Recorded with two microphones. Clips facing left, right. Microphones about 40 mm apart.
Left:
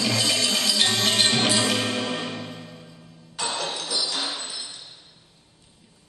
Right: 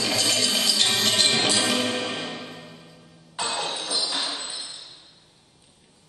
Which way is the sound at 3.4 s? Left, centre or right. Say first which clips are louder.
Even; centre.